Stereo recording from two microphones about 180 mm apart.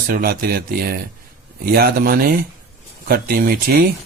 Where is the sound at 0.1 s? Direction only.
55° right (ahead or behind).